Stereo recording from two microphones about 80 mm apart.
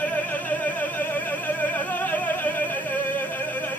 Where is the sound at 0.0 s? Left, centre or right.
Left.